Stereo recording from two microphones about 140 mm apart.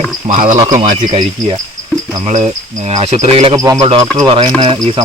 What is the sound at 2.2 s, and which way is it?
Speech, 55° right (ahead or behind).